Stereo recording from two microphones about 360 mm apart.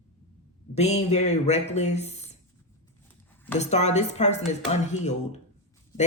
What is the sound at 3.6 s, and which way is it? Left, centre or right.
A woman's voice, centre.